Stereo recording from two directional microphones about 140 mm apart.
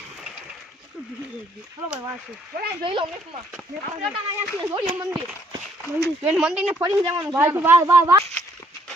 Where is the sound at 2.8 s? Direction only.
40° right (ahead or behind).